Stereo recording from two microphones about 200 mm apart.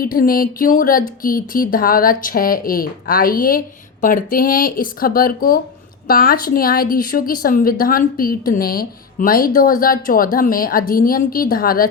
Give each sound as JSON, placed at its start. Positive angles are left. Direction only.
{"t": 0.0, "sound": "a woman's voice", "side_deg": 45}